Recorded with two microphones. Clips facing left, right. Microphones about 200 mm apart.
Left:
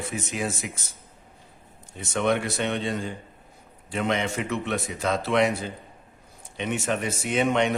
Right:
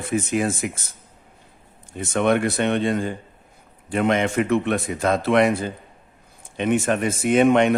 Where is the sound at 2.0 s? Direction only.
55° right (ahead or behind).